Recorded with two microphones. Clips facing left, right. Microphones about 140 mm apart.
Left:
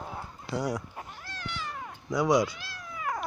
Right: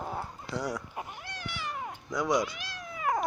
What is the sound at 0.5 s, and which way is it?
Speech, 10° left (ahead or behind).